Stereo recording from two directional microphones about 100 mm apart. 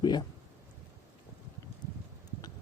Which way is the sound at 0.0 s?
45° left (ahead or behind).